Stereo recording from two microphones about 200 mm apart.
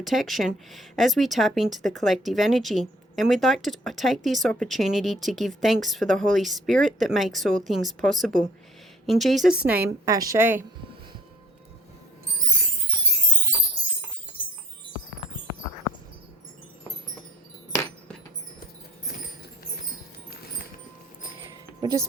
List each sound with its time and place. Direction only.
0.0 s a woman's voice: centre (ahead or behind)
21.8 s music: 20° right (ahead or behind)